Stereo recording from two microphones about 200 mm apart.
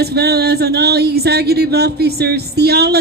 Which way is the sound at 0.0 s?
55° right (ahead or behind).